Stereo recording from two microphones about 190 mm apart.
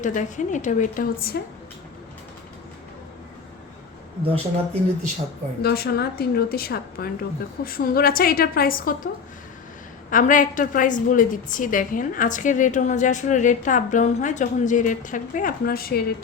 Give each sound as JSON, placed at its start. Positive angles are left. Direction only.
{"t": 0.0, "sound": "a woman's voice", "side_deg": 40}
{"t": 4.3, "sound": "speech", "side_deg": -35}
{"t": 5.6, "sound": "a woman's voice", "side_deg": 55}
{"t": 10.1, "sound": "a woman's voice", "side_deg": 45}